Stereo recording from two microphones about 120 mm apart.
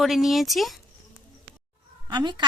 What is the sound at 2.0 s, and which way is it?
Speech, 40° right (ahead or behind).